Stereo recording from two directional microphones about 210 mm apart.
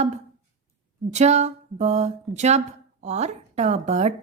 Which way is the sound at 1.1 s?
30° right (ahead or behind).